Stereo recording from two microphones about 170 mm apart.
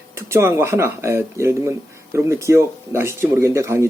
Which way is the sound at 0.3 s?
15° right (ahead or behind).